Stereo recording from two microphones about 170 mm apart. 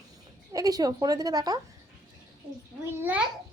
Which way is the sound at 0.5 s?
20° right (ahead or behind).